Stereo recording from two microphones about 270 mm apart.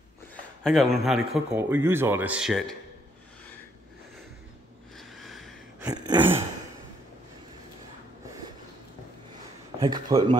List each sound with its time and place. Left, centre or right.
0.7 s a man's voice: centre
4.9 s a sound: centre
5.9 s speech: centre
9.8 s speech: centre